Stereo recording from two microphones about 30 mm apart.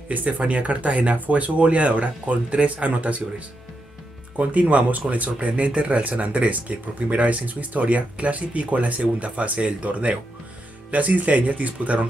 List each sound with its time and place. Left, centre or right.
0.1 s speech: right
4.4 s speech: right
10.9 s speech: right